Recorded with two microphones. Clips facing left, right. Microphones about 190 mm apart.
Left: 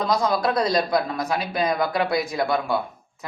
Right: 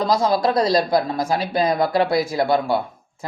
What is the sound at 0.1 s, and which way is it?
A man's voice, 30° right (ahead or behind).